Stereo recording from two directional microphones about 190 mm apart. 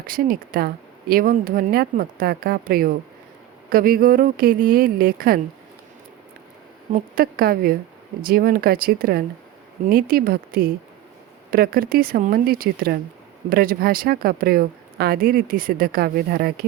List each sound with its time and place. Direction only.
0.0 s speech: 50° right (ahead or behind)
7.2 s speech: 50° right (ahead or behind)